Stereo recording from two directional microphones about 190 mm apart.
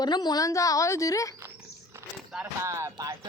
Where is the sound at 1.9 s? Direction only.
5° right (ahead or behind).